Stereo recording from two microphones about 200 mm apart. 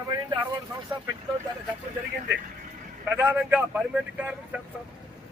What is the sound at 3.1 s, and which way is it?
A man's voice, 5° right (ahead or behind).